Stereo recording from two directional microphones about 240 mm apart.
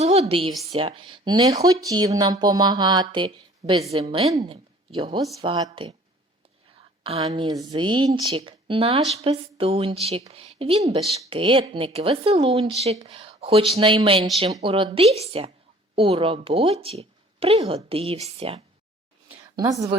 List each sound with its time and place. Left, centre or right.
0.0 s a woman's voice: right
7.0 s a woman's voice: right